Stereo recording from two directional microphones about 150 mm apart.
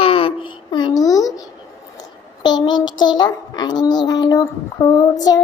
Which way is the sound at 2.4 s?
30° left (ahead or behind).